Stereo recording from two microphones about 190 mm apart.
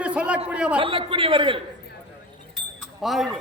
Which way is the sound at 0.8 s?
25° right (ahead or behind).